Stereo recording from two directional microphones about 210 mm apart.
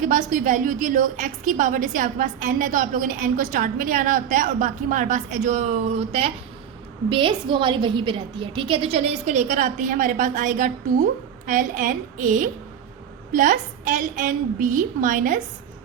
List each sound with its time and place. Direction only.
0.0 s a woman's voice: 35° right (ahead or behind)